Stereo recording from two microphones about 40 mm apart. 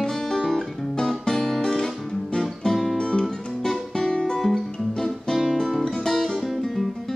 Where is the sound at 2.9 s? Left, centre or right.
Centre.